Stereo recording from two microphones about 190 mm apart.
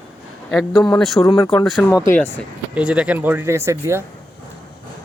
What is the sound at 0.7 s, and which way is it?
Speech, 20° left (ahead or behind).